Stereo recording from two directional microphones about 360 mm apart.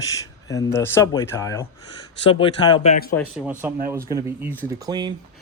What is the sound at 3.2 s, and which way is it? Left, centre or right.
Speech, centre.